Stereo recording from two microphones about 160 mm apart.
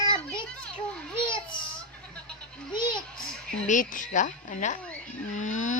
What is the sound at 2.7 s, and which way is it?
Speech, 30° left (ahead or behind).